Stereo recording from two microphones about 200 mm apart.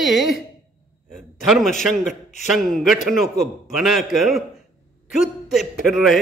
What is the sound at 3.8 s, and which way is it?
Speech, centre (ahead or behind).